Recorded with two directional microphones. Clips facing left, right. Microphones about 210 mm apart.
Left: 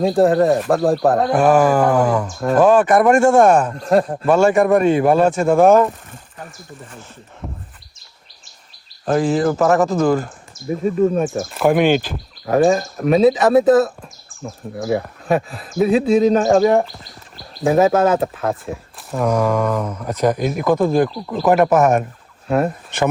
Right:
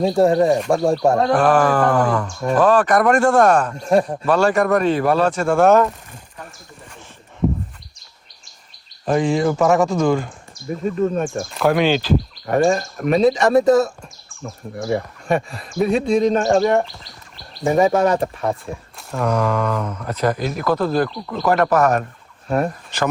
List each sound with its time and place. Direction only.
0.0 s speech: centre (ahead or behind)
3.2 s speech: 25° left (ahead or behind)
3.4 s speech: 10° left (ahead or behind)
7.4 s bird: centre (ahead or behind)
9.0 s speech: centre (ahead or behind)
11.9 s speech: 50° left (ahead or behind)
12.5 s speech: centre (ahead or behind)
21.1 s speech: 5° left (ahead or behind)